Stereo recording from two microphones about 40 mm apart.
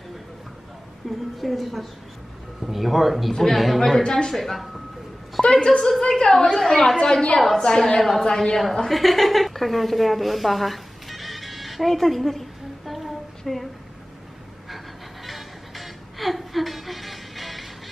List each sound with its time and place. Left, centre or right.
1.0 s a woman's voice: centre
4.0 s a woman's voice: centre
4.4 s speech: centre
5.4 s a woman's voice: centre
8.0 s a woman's voice: centre
15.2 s music: centre